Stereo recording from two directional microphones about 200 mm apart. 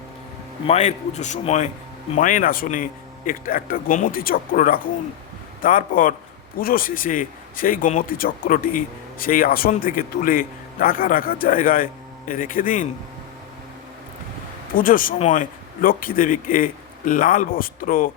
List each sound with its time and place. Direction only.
0.7 s a man's voice: 35° left (ahead or behind)
14.8 s speech: 45° left (ahead or behind)